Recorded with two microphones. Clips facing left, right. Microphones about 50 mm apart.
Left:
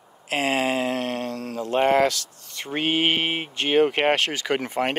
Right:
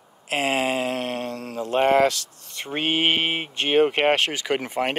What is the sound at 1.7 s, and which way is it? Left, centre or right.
Speech, centre.